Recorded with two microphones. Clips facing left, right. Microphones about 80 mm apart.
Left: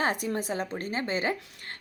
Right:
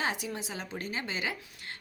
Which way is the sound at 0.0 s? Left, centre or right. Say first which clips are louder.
Left 5 dB; left.